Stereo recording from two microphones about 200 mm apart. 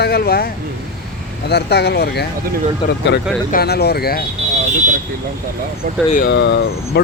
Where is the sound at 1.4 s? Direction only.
55° left (ahead or behind).